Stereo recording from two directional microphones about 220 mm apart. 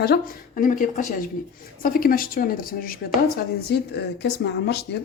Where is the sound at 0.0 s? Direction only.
40° left (ahead or behind).